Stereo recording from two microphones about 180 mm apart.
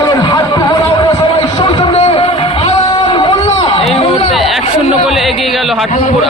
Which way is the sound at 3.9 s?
35° left (ahead or behind).